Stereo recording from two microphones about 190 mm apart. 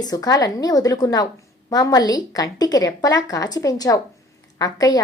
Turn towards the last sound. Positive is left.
turn(degrees=20)  # may be behind; listen again after turning